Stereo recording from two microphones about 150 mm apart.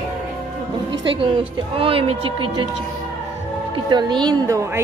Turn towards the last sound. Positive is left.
turn(degrees=-20)  # may be behind; listen again after turning